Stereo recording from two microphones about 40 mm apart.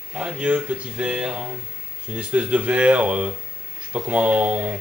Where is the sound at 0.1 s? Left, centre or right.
Right.